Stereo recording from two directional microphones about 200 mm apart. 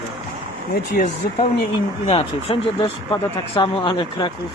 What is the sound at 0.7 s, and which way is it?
Speech, 45° left (ahead or behind).